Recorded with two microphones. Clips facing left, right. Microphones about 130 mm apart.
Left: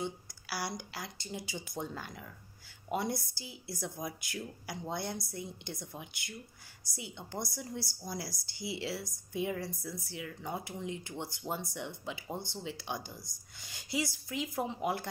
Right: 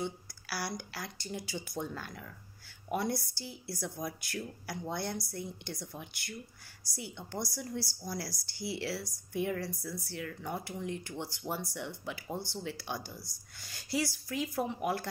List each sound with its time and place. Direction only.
0.0 s a woman's voice: 20° left (ahead or behind)